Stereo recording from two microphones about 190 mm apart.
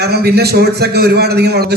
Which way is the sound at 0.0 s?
55° right (ahead or behind).